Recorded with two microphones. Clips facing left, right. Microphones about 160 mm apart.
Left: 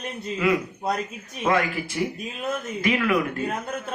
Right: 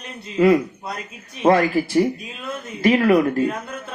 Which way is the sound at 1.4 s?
35° right (ahead or behind).